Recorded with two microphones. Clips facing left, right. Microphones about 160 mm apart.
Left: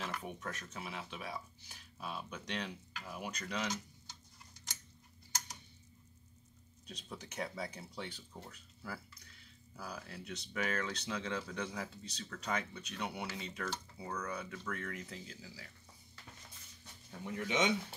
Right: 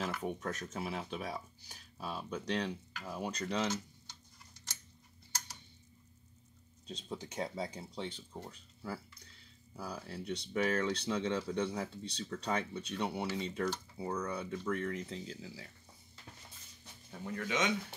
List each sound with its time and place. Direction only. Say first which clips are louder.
0.1 s speech: right 5 dB; 40° right (ahead or behind)
7.0 s speech: right 3 dB; 25° right (ahead or behind)
17.4 s speech: left 1 dB; 25° left (ahead or behind)